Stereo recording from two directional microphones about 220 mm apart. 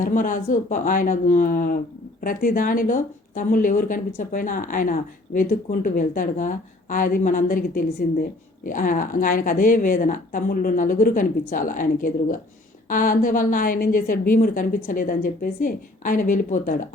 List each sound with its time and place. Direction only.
0.0 s speech: 35° left (ahead or behind)